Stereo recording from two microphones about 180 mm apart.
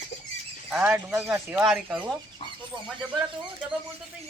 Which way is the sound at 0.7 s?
5° right (ahead or behind).